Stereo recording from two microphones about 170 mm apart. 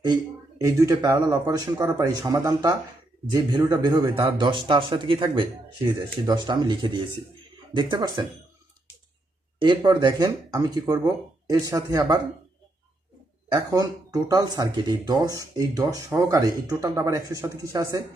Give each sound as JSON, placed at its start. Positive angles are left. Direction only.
{"t": 0.6, "sound": "speech", "side_deg": -20}
{"t": 9.6, "sound": "speech", "side_deg": -25}
{"t": 13.5, "sound": "speech", "side_deg": -20}